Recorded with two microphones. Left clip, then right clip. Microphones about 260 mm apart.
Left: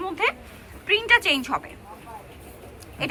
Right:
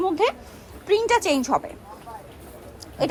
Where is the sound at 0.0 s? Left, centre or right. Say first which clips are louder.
Right 3 dB; right.